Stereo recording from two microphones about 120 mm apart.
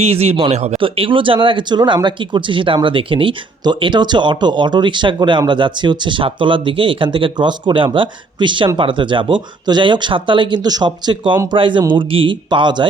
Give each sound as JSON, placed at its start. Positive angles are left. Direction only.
{"t": 0.0, "sound": "speech", "side_deg": -60}
{"t": 0.8, "sound": "speech", "side_deg": -45}